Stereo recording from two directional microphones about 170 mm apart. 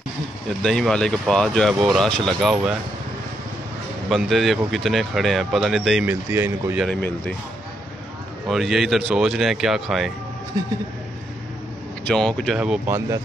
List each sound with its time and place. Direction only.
0.6 s speech: 5° left (ahead or behind)
4.1 s speech: centre (ahead or behind)
6.0 s speech: 10° right (ahead or behind)
6.8 s speech: 5° left (ahead or behind)
8.5 s speech: centre (ahead or behind)
10.6 s speech: 20° right (ahead or behind)
12.1 s speech: 5° left (ahead or behind)
12.5 s speech: 10° right (ahead or behind)